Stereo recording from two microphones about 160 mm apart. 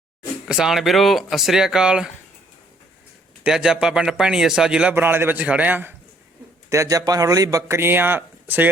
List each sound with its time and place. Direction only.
0.4 s a man's voice: 5° right (ahead or behind)
3.4 s a man's voice: 5° right (ahead or behind)